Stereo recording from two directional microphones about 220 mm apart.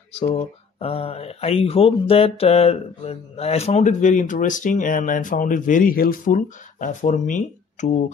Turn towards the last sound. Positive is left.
turn(degrees=35)  # may be behind; listen again after turning